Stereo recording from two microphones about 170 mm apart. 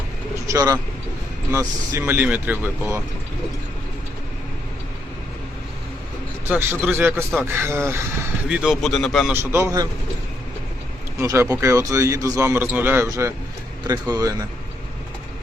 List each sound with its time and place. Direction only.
0.4 s a man's voice: 20° right (ahead or behind)
6.5 s a man's voice: 10° right (ahead or behind)
8.6 s speech: centre (ahead or behind)
9.3 s a man's voice: 15° right (ahead or behind)
11.2 s a man's voice: 15° right (ahead or behind)